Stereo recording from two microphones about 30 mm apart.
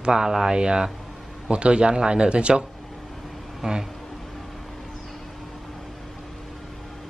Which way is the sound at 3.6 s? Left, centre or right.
Centre.